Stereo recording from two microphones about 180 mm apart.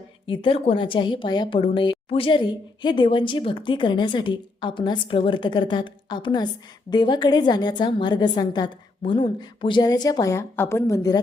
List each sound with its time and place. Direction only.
0.3 s a woman's voice: 30° left (ahead or behind)